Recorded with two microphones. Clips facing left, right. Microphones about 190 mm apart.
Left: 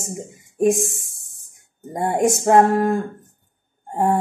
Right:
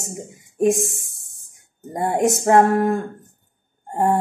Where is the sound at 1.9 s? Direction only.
Centre (ahead or behind).